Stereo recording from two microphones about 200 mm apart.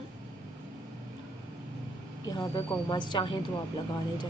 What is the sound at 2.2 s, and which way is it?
A woman's voice, 20° left (ahead or behind).